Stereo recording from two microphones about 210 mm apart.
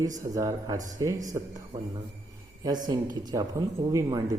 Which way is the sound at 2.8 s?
20° right (ahead or behind).